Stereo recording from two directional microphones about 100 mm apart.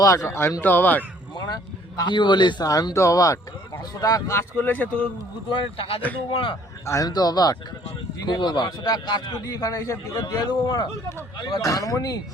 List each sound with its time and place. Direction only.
0.0 s speech: 30° left (ahead or behind)
1.4 s speech: 40° left (ahead or behind)
2.6 s speech: 35° left (ahead or behind)
4.3 s speech: 25° left (ahead or behind)
5.7 s speech: 70° left (ahead or behind)
6.3 s a man's voice: 55° left (ahead or behind)
6.8 s speech: 30° left (ahead or behind)
7.1 s a man's voice: 40° left (ahead or behind)
11.6 s speech: 35° left (ahead or behind)